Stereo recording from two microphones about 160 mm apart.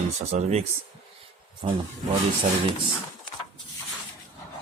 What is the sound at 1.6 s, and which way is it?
Speech, 40° right (ahead or behind).